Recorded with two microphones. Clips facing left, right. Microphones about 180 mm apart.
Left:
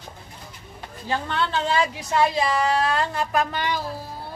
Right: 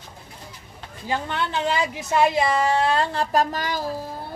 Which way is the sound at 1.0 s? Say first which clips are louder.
Even; 15° right (ahead or behind).